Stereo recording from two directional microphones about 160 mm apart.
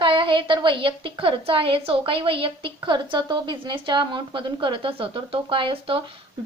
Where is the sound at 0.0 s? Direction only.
30° right (ahead or behind).